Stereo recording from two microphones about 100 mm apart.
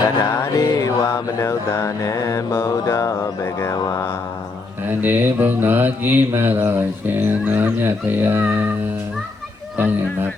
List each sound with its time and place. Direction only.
0.3 s mantra: 35° left (ahead or behind)
4.9 s mantra: 20° right (ahead or behind)
9.7 s speech: 20° right (ahead or behind)